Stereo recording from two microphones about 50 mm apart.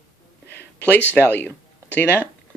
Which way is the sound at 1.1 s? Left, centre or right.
Left.